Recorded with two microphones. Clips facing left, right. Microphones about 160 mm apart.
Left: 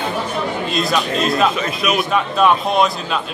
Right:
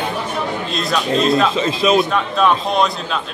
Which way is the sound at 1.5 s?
25° right (ahead or behind).